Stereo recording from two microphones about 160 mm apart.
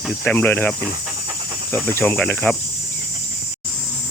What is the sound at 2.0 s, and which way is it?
Speech, 10° left (ahead or behind).